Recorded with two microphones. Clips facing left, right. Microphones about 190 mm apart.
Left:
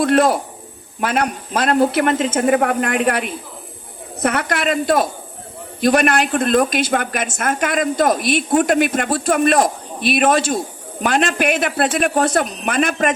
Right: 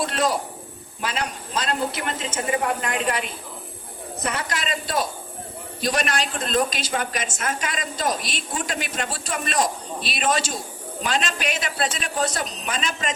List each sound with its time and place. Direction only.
0.0 s a man's voice: 55° left (ahead or behind)